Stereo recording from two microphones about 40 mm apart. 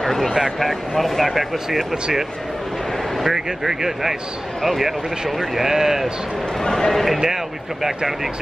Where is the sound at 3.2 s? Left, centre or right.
Centre.